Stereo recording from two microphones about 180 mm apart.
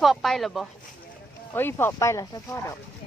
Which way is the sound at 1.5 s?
10° left (ahead or behind).